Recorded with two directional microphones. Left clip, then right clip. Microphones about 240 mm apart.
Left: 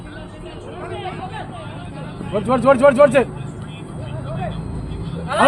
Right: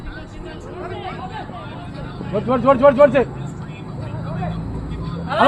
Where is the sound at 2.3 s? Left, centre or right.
Left.